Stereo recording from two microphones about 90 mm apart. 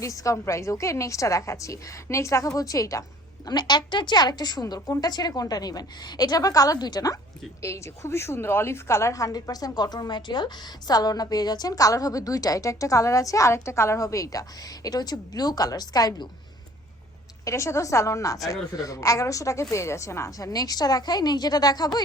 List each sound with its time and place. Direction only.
0.0 s a woman's voice: 40° left (ahead or behind)
3.4 s a woman's voice: 50° left (ahead or behind)
7.6 s a woman's voice: 35° left (ahead or behind); by 16.3 s 50° left (ahead or behind)
17.4 s a woman's voice: 35° left (ahead or behind)